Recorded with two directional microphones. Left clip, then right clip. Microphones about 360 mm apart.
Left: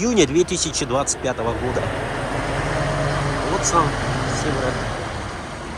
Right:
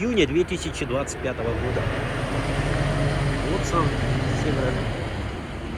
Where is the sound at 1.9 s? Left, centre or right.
Left.